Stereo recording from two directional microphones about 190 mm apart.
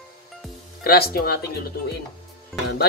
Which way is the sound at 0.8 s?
55° left (ahead or behind).